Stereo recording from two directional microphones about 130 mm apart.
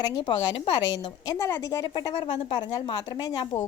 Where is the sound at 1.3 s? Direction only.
20° left (ahead or behind).